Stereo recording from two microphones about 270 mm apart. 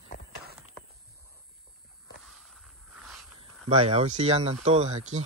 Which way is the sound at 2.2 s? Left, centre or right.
Centre.